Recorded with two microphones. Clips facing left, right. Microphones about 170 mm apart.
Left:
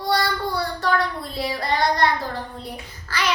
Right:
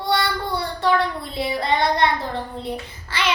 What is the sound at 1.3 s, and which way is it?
A child's voice, 25° right (ahead or behind).